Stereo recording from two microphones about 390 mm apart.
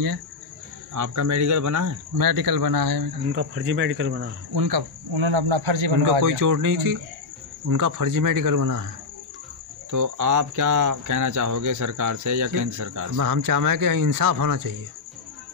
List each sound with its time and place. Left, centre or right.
0.9 s speech: right
3.3 s speech: right
4.6 s speech: right
6.0 s speech: right
9.8 s speech: right